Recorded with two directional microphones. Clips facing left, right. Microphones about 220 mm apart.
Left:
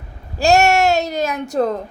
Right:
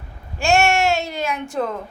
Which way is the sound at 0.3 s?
35° left (ahead or behind).